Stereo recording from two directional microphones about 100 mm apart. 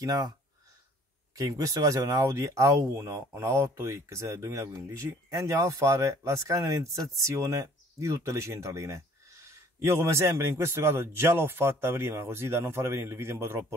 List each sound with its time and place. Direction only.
0.0 s speech: 35° right (ahead or behind)
1.3 s speech: 35° right (ahead or behind)